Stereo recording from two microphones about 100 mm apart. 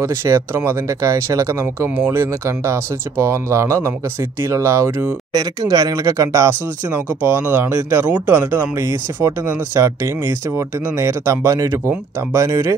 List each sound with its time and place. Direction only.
0.0 s speech: 30° right (ahead or behind)
5.3 s speech: 40° right (ahead or behind)
7.2 s speech: 20° right (ahead or behind)